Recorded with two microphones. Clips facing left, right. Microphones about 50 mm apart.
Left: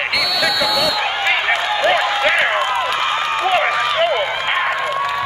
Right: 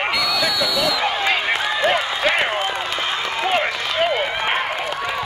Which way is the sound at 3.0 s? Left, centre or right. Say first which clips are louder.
Left 4 dB; left.